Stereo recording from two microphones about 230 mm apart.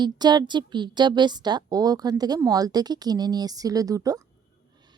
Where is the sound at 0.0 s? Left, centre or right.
Centre.